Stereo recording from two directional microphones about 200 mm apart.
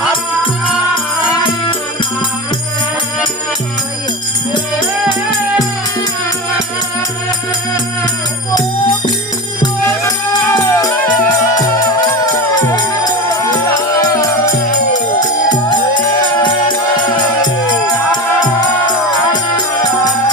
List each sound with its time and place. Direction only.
8.5 s music: 20° left (ahead or behind)
12.6 s music: 20° left (ahead or behind)
19.3 s music: 20° left (ahead or behind)